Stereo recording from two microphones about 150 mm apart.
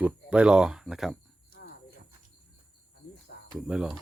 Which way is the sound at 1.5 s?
75° left (ahead or behind).